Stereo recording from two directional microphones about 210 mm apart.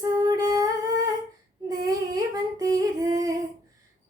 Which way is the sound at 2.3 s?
15° right (ahead or behind).